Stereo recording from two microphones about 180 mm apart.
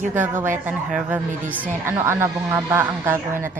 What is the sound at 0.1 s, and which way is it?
A woman's voice, 10° right (ahead or behind).